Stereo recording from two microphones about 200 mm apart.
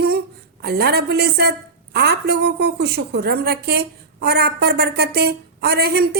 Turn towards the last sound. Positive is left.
turn(degrees=-50)  # may be behind; listen again after turning